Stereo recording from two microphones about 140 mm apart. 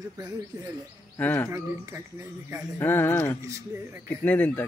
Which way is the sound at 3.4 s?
20° right (ahead or behind).